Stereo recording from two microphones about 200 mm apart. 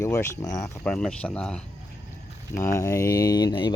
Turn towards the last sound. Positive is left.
turn(degrees=20)  # may be behind; listen again after turning